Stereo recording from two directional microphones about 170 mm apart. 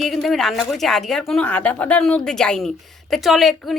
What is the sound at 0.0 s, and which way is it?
A woman's voice, centre (ahead or behind).